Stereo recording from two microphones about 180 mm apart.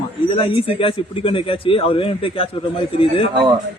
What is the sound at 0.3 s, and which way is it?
A man's voice, 30° left (ahead or behind).